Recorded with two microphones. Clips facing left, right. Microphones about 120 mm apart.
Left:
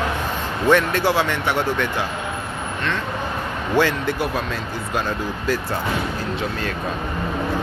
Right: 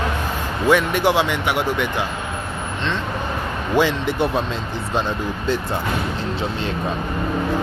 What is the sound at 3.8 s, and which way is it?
Speech, 20° right (ahead or behind).